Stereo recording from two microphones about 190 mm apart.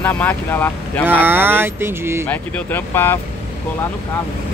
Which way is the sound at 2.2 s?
10° left (ahead or behind).